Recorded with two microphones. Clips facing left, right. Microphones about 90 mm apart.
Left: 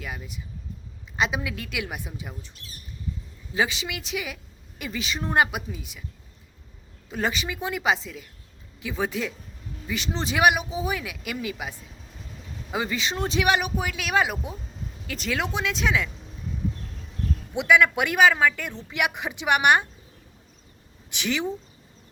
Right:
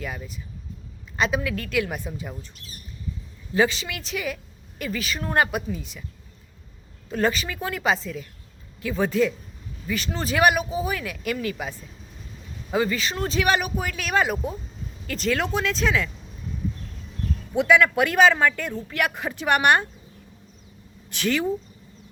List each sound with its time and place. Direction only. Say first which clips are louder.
0.0 s speech: right 3 dB; 10° left (ahead or behind)
3.5 s speech: right 4 dB; 10° left (ahead or behind)
7.1 s speech: right 4 dB; 10° left (ahead or behind)
12.7 s speech: right 4 dB; 15° left (ahead or behind)
17.5 s speech: right 1 dB; 15° left (ahead or behind)
21.1 s speech: right 3 dB; 15° left (ahead or behind)